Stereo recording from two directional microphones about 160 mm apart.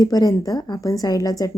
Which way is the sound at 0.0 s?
25° left (ahead or behind).